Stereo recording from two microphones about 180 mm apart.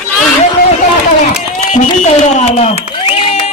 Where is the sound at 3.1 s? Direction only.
30° left (ahead or behind).